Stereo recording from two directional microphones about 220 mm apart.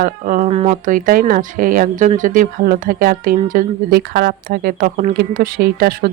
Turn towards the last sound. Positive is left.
turn(degrees=-45)  # may be behind; listen again after turning